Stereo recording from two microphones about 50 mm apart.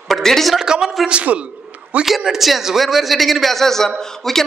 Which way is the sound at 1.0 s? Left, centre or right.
Right.